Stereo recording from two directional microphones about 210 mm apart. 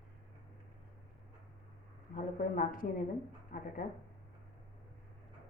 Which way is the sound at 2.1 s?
40° left (ahead or behind).